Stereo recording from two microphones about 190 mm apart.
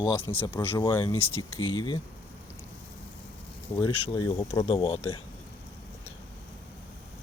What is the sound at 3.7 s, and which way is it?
Speech, 25° left (ahead or behind).